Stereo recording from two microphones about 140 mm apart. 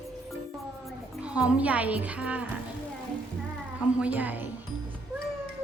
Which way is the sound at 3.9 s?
10° right (ahead or behind).